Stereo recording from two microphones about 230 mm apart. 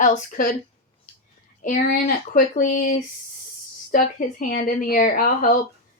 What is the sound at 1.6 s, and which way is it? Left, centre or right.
Speech, left.